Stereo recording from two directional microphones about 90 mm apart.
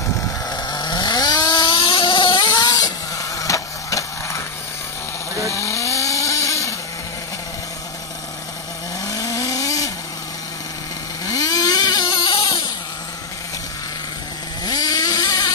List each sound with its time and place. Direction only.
0.5 s chainsaw: 50° left (ahead or behind)
5.5 s vehicle: 35° left (ahead or behind)
9.0 s vehicle: 35° left (ahead or behind)
11.2 s vehicle: 40° left (ahead or behind); by 12.6 s 75° left (ahead or behind)
14.6 s vehicle: 45° left (ahead or behind)